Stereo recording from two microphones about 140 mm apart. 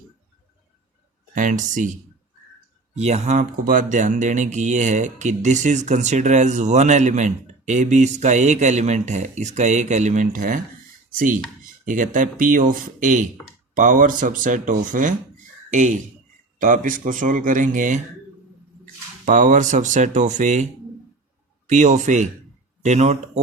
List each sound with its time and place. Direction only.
1.4 s speech: 65° right (ahead or behind)
2.9 s speech: 50° right (ahead or behind)
3.6 s speech: 75° right (ahead or behind)
11.9 s a man's voice: 70° right (ahead or behind)
19.2 s speech: 65° right (ahead or behind)
21.7 s speech: 60° right (ahead or behind)